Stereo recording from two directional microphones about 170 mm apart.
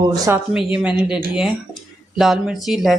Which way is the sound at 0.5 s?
5° right (ahead or behind).